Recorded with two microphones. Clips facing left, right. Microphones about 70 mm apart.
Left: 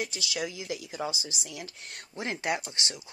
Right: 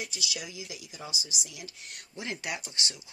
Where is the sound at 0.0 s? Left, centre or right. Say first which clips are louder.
Left 5 dB; left.